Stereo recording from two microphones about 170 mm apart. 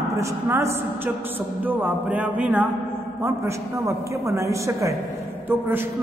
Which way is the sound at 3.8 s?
15° right (ahead or behind).